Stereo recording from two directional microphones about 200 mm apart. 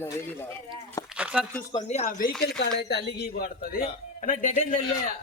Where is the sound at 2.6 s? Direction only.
55° left (ahead or behind).